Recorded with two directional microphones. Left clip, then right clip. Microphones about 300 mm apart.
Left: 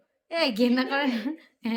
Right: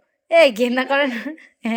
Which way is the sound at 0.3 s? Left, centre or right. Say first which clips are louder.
Right 11 dB; centre.